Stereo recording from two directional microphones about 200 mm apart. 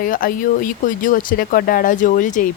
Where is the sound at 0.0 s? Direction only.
45° left (ahead or behind).